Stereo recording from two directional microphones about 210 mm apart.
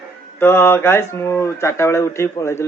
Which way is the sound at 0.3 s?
10° left (ahead or behind).